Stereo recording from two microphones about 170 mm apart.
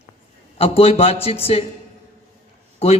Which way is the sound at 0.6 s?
35° left (ahead or behind).